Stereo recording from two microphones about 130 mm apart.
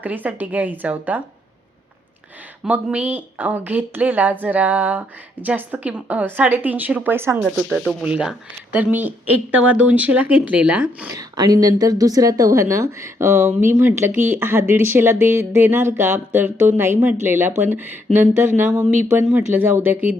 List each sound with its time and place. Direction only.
0.0 s speech: 15° right (ahead or behind)
2.6 s speech: 10° right (ahead or behind)
7.4 s speech: centre (ahead or behind)
11.1 s speech: 30° right (ahead or behind)